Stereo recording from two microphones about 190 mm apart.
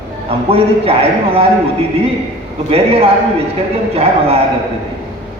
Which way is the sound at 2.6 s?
30° right (ahead or behind).